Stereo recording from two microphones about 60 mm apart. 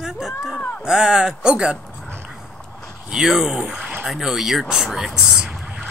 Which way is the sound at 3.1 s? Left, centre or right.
Centre.